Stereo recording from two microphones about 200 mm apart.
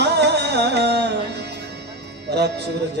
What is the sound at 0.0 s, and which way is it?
Music, 60° right (ahead or behind).